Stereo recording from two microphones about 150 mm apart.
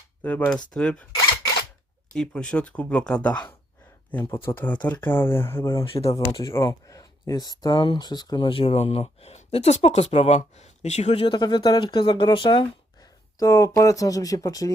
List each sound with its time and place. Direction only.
0.2 s speech: 10° left (ahead or behind)
2.1 s speech: 5° left (ahead or behind)
5.8 s speech: 40° left (ahead or behind)
6.4 s speech: 20° left (ahead or behind); by 11.3 s 45° left (ahead or behind)
11.3 s speech: 30° left (ahead or behind)
13.4 s speech: 20° left (ahead or behind)